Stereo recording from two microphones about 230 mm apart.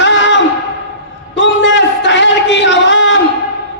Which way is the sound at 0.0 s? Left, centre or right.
Left.